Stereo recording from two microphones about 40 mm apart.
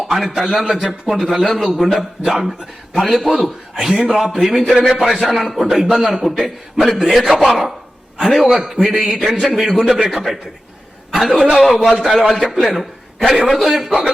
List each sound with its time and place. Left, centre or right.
0.1 s speech: centre
0.4 s speech: centre
1.1 s speech: centre
5.4 s a man's voice: centre
5.6 s a man's voice: centre
13.3 s speech: centre
13.6 s a man's voice: centre